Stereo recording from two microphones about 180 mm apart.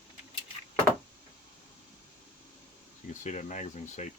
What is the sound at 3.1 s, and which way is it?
Speech, 40° left (ahead or behind).